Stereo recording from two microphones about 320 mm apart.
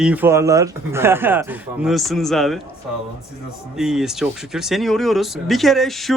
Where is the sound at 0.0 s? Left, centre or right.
Centre.